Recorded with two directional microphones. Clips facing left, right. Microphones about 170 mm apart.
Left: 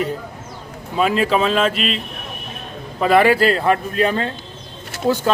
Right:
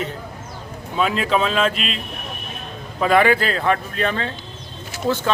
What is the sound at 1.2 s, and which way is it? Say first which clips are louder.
Speech: left 2 dB; 5° left (ahead or behind).